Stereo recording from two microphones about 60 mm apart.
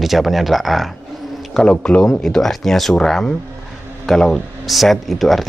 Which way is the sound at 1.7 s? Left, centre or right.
Centre.